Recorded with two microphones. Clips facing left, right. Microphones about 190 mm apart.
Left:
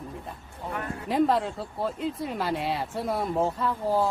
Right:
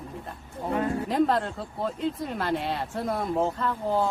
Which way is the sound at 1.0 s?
5° left (ahead or behind).